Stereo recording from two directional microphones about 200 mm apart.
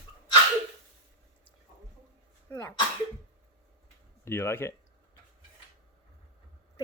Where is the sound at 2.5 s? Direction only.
10° left (ahead or behind).